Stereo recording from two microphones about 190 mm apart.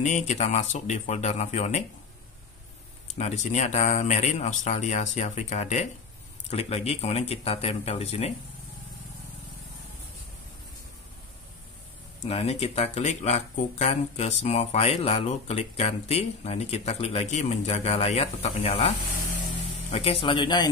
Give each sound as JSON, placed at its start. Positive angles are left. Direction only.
{"t": 0.0, "sound": "speech", "side_deg": 40}
{"t": 3.1, "sound": "speech", "side_deg": 35}
{"t": 12.3, "sound": "speech", "side_deg": 30}